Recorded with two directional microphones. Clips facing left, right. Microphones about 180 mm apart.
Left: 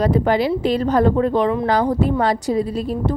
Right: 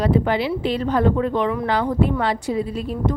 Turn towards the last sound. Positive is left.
turn(degrees=35)  # may be behind; listen again after turning